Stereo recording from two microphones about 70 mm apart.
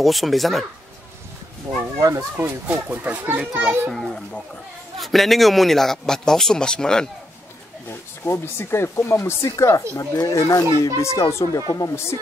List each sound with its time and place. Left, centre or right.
0.0 s a man's voice: centre
1.7 s speech: right
2.3 s a child's voice: right
3.9 s a man's voice: centre
7.9 s speech: left
9.9 s speech: left
10.3 s speech: left
11.9 s speech: left